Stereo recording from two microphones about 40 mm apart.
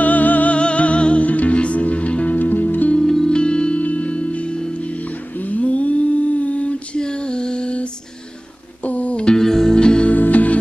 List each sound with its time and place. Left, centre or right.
0.0 s music: left
0.6 s music: left
2.3 s music: left
3.0 s music: centre; by 4.6 s left
5.4 s a sound: left
7.0 s female singing: left
8.8 s music: left
9.3 s music: centre
9.8 s music: left
10.0 s music: left